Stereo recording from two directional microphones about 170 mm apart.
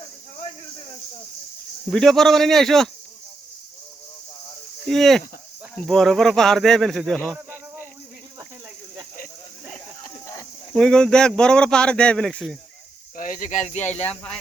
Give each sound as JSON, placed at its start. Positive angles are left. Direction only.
{"t": 1.9, "sound": "speech", "side_deg": 0}
{"t": 4.9, "sound": "speech", "side_deg": 0}
{"t": 10.8, "sound": "speech", "side_deg": 5}
{"t": 13.1, "sound": "speech", "side_deg": 50}